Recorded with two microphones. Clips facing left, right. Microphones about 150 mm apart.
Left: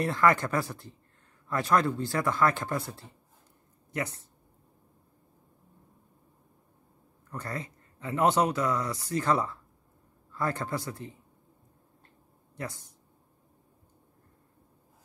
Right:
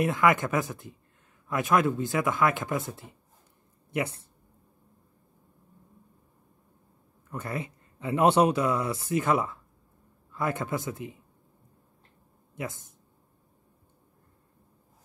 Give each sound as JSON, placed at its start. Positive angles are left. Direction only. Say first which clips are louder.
{"t": 0.0, "sound": "speech", "louder": "right 1 dB", "side_deg": -15}
{"t": 7.2, "sound": "a man's voice", "louder": "right 3 dB", "side_deg": -20}